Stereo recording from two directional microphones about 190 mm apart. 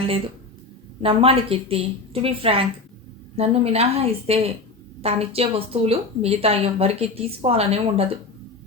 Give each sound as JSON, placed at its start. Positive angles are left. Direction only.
{"t": 1.0, "sound": "a woman's voice", "side_deg": -30}